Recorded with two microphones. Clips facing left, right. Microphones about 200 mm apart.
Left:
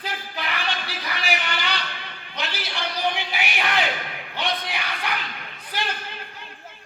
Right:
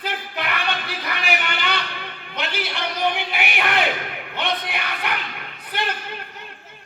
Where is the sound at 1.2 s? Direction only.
60° right (ahead or behind).